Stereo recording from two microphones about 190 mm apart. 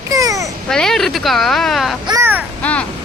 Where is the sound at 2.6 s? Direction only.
5° left (ahead or behind).